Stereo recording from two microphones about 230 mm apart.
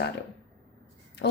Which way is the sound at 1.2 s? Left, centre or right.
Left.